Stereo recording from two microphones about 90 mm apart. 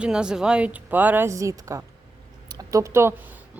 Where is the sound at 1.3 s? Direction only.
35° right (ahead or behind).